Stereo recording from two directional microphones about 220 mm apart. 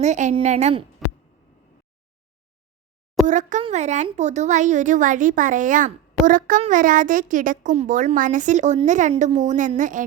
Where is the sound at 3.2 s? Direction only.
35° right (ahead or behind).